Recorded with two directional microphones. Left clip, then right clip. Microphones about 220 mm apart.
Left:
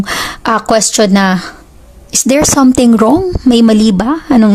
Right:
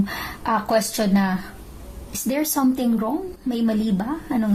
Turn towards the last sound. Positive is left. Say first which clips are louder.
# left 15 dB
turn(degrees=45)  # may be behind; listen again after turning